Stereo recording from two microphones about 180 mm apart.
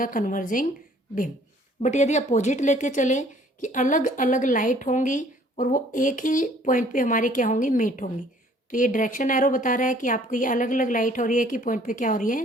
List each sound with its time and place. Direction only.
0.0 s speech: 50° left (ahead or behind)
1.8 s speech: 40° left (ahead or behind)